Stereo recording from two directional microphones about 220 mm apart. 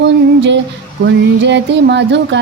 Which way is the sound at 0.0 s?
55° right (ahead or behind).